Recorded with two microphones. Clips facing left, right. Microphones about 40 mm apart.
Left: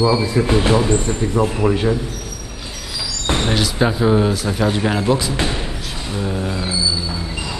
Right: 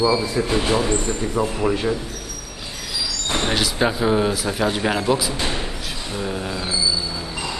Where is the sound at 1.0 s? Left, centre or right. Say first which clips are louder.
Left 4 dB; centre.